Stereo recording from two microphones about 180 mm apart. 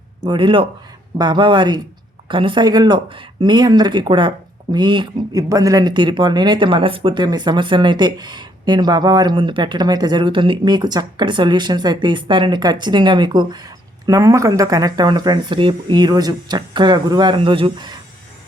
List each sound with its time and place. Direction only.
0.2 s speech: 25° right (ahead or behind)